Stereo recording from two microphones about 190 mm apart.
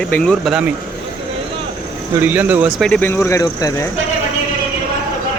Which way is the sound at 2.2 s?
10° right (ahead or behind).